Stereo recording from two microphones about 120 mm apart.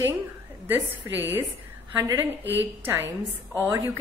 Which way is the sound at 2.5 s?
15° right (ahead or behind).